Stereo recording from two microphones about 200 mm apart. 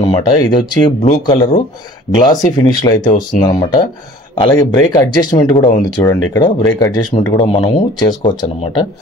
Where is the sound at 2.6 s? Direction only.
20° left (ahead or behind).